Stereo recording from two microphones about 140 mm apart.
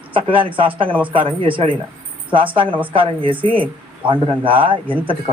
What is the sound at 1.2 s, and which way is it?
A man's voice, 40° right (ahead or behind).